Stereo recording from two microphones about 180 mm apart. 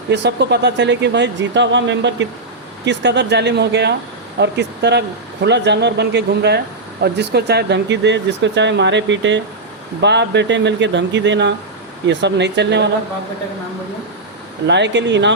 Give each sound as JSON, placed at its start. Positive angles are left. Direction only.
{"t": 0.1, "sound": "speech", "side_deg": -70}
{"t": 2.8, "sound": "speech", "side_deg": -75}
{"t": 10.0, "sound": "speech", "side_deg": -75}
{"t": 14.7, "sound": "speech", "side_deg": -80}